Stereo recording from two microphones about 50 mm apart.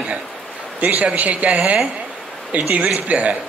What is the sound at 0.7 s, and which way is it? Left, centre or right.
Speech, right.